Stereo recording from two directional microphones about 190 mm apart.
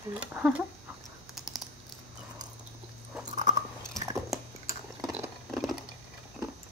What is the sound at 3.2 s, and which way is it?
Chewing, 40° right (ahead or behind).